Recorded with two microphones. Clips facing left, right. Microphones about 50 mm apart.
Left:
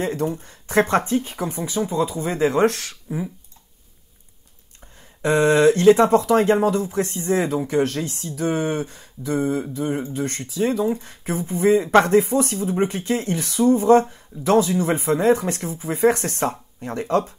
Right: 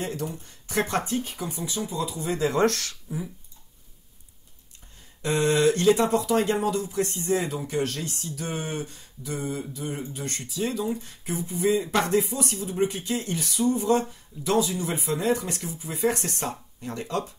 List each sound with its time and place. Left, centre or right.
0.0 s speech: left
5.2 s speech: left